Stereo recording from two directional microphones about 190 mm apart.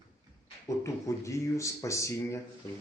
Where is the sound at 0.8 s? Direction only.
15° left (ahead or behind).